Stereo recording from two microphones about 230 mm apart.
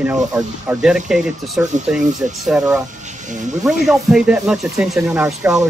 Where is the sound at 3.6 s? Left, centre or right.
Centre.